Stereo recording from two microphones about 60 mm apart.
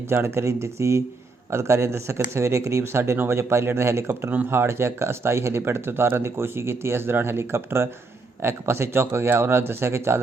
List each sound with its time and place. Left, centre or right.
0.1 s speech: right
3.0 s speech: right